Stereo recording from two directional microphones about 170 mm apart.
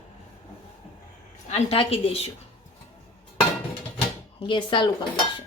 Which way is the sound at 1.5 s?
35° left (ahead or behind).